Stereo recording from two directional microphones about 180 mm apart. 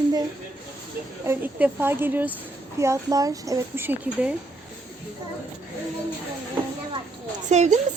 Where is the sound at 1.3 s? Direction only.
10° right (ahead or behind).